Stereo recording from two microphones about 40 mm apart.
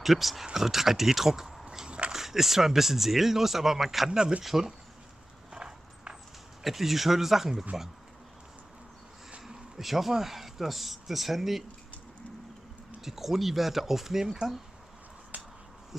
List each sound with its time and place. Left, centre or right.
0.0 s speech: centre
1.6 s a sound: centre
1.9 s dog: right
2.1 s speech: centre
5.5 s horse: centre
6.6 s speech: centre
9.5 s speech: centre
13.0 s speech: centre
15.3 s finger snapping: right